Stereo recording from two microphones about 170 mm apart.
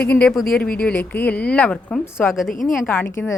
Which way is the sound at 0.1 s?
5° left (ahead or behind).